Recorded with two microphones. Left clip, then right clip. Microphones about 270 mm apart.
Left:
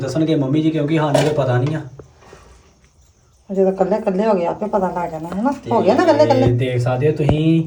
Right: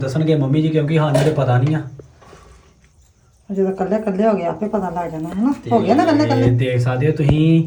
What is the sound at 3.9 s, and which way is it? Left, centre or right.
Speech, centre.